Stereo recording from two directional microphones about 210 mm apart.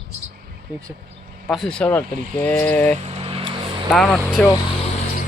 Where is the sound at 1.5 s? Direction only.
Centre (ahead or behind).